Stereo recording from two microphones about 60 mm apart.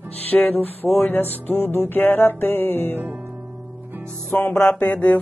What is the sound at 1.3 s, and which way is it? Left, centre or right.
Music, left.